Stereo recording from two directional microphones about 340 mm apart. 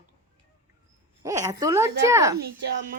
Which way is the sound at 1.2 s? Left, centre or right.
Centre.